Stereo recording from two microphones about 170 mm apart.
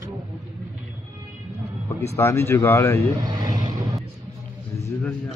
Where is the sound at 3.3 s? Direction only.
25° right (ahead or behind).